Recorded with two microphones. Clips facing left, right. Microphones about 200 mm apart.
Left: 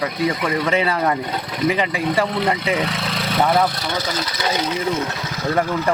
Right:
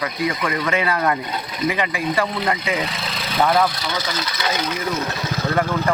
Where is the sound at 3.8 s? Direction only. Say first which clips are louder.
Left 2 dB; 55° left (ahead or behind).